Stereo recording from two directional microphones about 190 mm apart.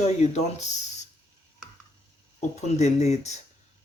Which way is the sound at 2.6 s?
35° left (ahead or behind).